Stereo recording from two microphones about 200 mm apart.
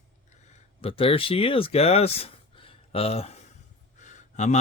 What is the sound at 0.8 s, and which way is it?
Speech, 30° left (ahead or behind).